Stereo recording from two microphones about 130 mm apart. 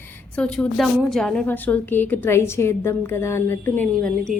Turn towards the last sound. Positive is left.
turn(degrees=5)  # may be behind; listen again after turning